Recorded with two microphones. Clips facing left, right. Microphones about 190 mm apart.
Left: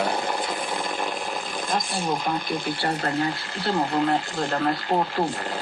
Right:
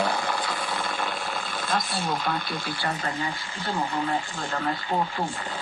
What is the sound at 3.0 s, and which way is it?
Speech, 65° left (ahead or behind).